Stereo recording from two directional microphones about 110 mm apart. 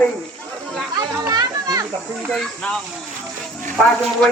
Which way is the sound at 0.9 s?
40° right (ahead or behind).